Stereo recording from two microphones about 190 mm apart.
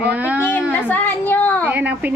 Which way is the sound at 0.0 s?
5° right (ahead or behind).